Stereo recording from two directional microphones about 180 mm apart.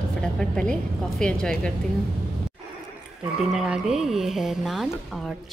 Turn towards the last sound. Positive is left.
turn(degrees=0)  # may be behind; listen again after turning